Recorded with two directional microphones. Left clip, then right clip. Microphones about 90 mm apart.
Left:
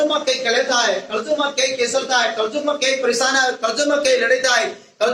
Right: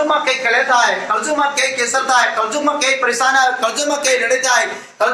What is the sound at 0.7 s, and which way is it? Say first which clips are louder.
Speech: right 4 dB; 30° left (ahead or behind).